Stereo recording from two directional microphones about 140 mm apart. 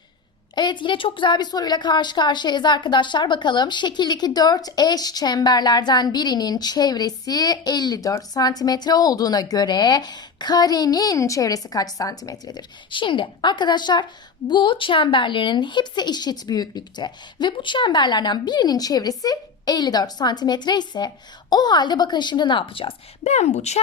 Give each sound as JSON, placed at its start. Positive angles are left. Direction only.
{"t": 0.5, "sound": "a woman's voice", "side_deg": 35}